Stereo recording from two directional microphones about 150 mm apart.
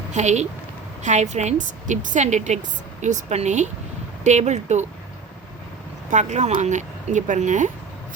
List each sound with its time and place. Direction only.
0.1 s a woman's voice: 50° right (ahead or behind)
6.1 s a woman's voice: 55° right (ahead or behind)